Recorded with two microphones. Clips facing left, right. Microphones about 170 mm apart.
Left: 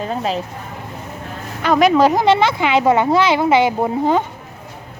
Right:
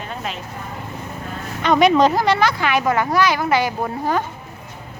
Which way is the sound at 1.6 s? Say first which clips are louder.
Left 1 dB; centre (ahead or behind).